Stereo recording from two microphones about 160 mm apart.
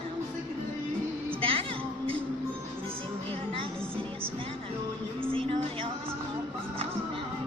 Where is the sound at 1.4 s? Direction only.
35° right (ahead or behind).